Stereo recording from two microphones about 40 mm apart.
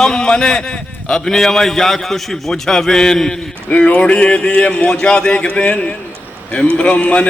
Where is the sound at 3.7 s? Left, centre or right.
Left.